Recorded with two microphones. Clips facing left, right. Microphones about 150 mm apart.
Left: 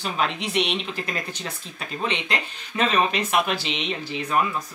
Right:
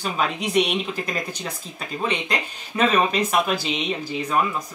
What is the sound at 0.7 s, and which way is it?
Speech, 10° right (ahead or behind).